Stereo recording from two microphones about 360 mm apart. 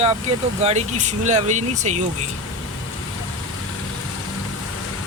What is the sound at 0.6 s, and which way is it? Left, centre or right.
Speech, centre.